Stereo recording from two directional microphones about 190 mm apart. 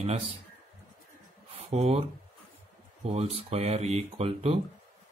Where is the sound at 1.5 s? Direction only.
35° right (ahead or behind).